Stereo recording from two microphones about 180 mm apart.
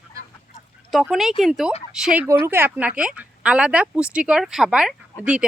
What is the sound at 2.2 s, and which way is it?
Speech, 15° right (ahead or behind).